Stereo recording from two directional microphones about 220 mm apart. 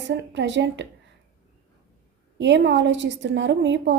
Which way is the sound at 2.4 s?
55° right (ahead or behind).